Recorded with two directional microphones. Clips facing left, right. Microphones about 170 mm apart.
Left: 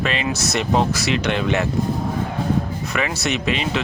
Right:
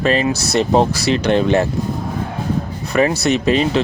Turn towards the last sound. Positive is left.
turn(degrees=-35)  # may be behind; listen again after turning